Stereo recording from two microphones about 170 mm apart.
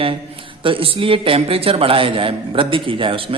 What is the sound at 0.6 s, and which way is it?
A man's voice, 30° right (ahead or behind).